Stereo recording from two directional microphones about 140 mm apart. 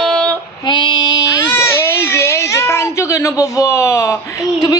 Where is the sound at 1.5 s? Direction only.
20° left (ahead or behind).